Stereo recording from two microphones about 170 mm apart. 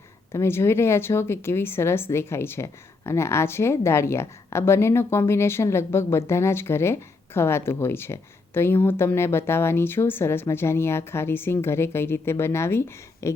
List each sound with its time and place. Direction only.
0.3 s speech: 15° left (ahead or behind)